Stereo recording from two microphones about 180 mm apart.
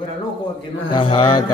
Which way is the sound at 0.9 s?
30° left (ahead or behind).